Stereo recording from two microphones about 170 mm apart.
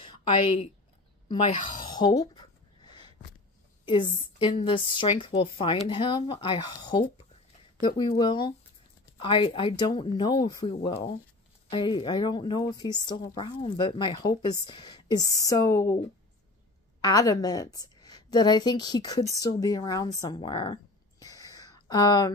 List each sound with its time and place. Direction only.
0.0 s a sound: 30° left (ahead or behind)
3.8 s speech: 30° left (ahead or behind)
11.7 s speech: 25° left (ahead or behind)
17.0 s speech: 20° left (ahead or behind)